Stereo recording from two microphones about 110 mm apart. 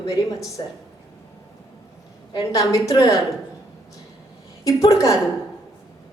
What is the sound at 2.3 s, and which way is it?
Speech, 35° left (ahead or behind).